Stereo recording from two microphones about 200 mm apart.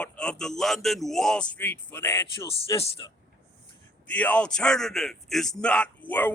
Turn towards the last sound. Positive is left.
turn(degrees=10)  # may be behind; listen again after turning